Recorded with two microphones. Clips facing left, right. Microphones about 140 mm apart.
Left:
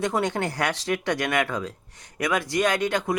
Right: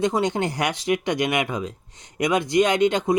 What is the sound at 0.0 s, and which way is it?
Speech, 20° right (ahead or behind).